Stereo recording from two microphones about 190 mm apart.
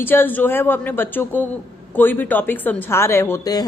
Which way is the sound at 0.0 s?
10° left (ahead or behind).